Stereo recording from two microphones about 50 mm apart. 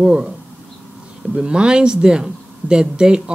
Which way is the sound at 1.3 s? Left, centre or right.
Centre.